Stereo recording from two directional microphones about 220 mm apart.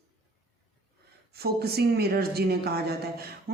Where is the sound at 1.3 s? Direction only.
45° right (ahead or behind).